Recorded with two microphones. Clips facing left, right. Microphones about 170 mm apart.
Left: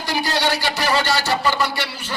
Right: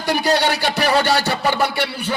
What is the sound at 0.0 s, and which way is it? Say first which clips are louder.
A man's voice: right 4 dB; 60° right (ahead or behind).